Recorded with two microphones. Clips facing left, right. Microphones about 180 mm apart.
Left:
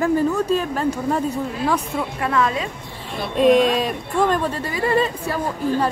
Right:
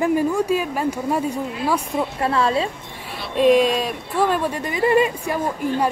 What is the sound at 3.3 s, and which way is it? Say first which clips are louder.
Speech: even; centre (ahead or behind).